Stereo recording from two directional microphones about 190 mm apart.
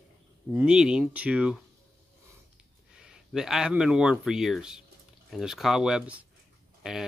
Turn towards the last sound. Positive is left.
turn(degrees=-5)  # may be behind; listen again after turning